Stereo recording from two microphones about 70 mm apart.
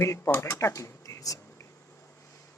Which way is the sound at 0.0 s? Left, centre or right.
Left.